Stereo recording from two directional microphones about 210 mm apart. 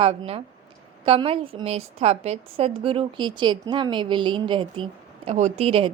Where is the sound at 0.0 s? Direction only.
30° right (ahead or behind).